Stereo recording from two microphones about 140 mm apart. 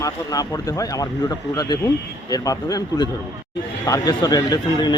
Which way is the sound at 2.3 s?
25° left (ahead or behind).